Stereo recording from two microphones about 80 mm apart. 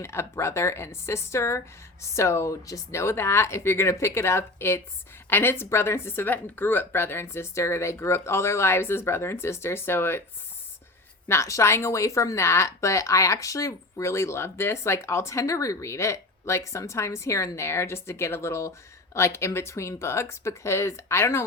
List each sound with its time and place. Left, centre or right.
0.0 s speech: left
11.3 s speech: left